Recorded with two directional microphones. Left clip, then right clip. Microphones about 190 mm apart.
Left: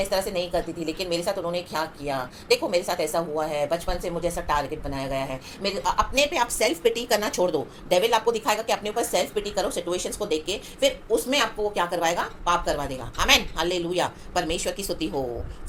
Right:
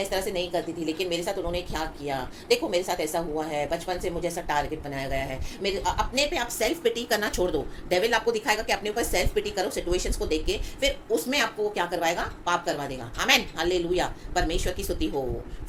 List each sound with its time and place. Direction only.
0.1 s a woman's voice: 10° left (ahead or behind)